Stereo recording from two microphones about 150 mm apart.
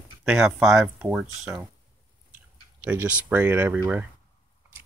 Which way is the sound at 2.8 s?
10° right (ahead or behind).